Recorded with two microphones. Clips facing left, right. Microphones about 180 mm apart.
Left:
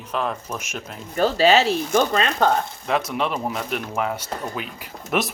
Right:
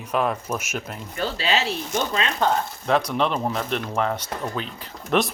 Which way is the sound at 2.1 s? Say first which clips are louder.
Left 4 dB; 65° left (ahead or behind).